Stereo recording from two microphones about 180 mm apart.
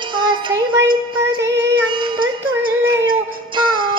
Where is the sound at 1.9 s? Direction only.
25° right (ahead or behind).